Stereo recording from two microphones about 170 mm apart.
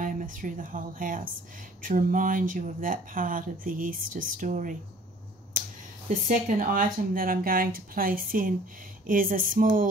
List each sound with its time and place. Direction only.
0.0 s speech: 50° right (ahead or behind)
5.5 s finger snapping: 50° right (ahead or behind)
6.0 s speech: 50° right (ahead or behind)